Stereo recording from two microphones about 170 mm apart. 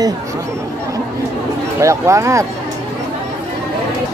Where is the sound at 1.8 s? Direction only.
15° right (ahead or behind).